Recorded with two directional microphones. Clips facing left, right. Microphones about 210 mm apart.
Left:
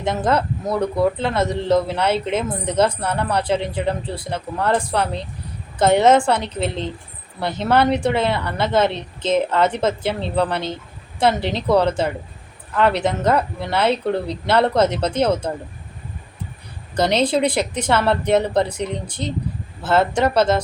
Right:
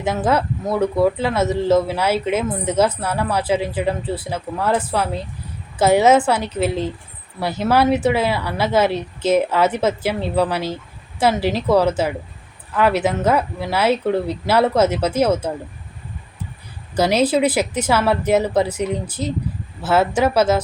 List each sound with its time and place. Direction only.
0.0 s a woman's voice: 5° right (ahead or behind)
16.9 s a woman's voice: 5° right (ahead or behind)